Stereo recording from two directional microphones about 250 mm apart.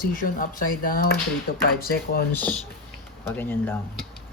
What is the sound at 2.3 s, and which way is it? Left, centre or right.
Speech, centre.